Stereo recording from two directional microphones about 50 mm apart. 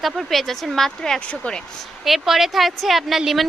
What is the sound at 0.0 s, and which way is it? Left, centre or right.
A woman's voice, centre.